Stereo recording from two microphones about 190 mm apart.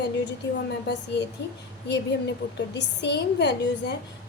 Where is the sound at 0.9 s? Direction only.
65° left (ahead or behind).